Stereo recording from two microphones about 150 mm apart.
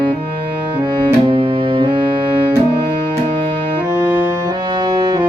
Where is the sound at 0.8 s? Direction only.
35° right (ahead or behind).